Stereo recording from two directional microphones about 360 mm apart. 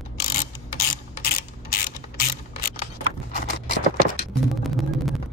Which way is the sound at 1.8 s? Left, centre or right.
Left.